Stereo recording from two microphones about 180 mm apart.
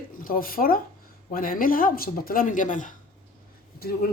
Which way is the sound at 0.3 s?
50° left (ahead or behind).